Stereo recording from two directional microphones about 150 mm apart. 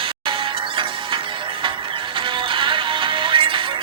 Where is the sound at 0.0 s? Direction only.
35° right (ahead or behind).